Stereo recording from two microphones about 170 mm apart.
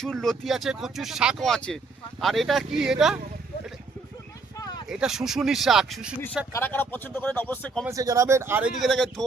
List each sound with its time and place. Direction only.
0.0 s speech: 5° left (ahead or behind)
4.5 s a sound: 20° left (ahead or behind)
4.9 s speech: 5° right (ahead or behind)
6.5 s speech: 10° left (ahead or behind)
7.9 s speech: 20° right (ahead or behind)
8.8 s speech: centre (ahead or behind)